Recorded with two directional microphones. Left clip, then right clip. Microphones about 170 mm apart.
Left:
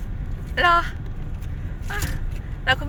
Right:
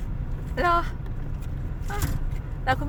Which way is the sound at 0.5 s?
15° right (ahead or behind).